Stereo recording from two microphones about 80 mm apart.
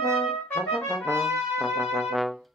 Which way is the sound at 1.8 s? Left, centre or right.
Centre.